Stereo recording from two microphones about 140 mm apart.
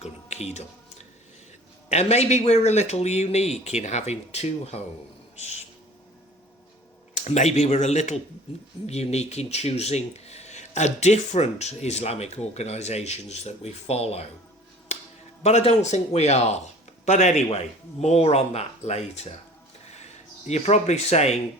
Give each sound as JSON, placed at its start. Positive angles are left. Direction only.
{"t": 0.0, "sound": "a sound", "side_deg": 50}
{"t": 1.9, "sound": "speech", "side_deg": 50}
{"t": 7.1, "sound": "speech", "side_deg": 55}
{"t": 14.9, "sound": "a sound", "side_deg": 55}
{"t": 15.4, "sound": "speech", "side_deg": 50}
{"t": 20.5, "sound": "speech", "side_deg": 50}